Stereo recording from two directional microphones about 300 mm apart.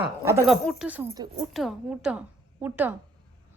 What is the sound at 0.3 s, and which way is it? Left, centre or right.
Speech, centre.